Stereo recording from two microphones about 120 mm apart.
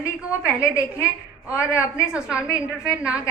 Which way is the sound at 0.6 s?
25° left (ahead or behind).